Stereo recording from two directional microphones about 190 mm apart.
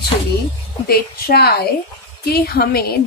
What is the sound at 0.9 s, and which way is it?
A woman's voice, 55° left (ahead or behind).